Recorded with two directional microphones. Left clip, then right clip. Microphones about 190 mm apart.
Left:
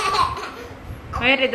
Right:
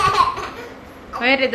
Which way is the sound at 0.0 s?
Centre (ahead or behind).